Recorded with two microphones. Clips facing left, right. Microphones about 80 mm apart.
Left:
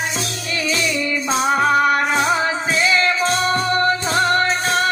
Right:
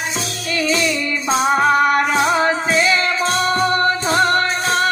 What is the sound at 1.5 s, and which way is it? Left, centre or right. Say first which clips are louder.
Music: right 1 dB; right.